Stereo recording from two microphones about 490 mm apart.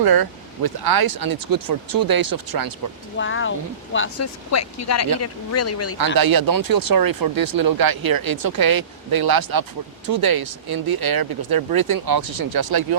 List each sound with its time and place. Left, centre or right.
0.0 s speech: right
3.2 s speech: left
6.1 s speech: right